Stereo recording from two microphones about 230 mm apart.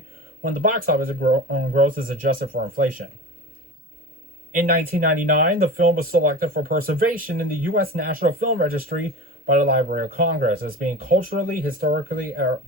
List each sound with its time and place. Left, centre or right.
0.4 s speech: right
4.5 s speech: right